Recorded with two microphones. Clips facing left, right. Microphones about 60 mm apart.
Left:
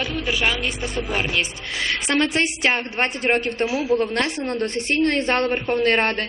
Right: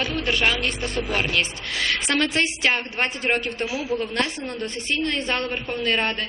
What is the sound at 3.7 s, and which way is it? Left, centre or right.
A man's voice, left.